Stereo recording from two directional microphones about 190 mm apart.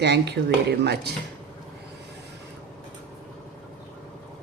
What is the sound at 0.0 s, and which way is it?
Speech, 65° right (ahead or behind).